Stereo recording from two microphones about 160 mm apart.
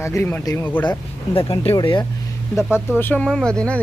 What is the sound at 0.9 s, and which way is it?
Speech, 35° left (ahead or behind).